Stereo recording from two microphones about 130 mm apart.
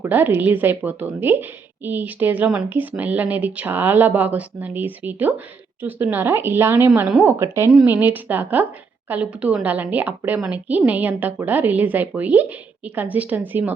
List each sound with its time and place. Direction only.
0.0 s a woman's voice: 15° right (ahead or behind)